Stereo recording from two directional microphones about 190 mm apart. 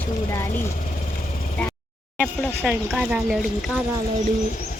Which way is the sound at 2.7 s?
5° right (ahead or behind).